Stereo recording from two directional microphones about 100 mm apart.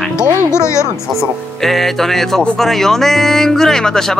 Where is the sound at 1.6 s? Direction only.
Centre (ahead or behind).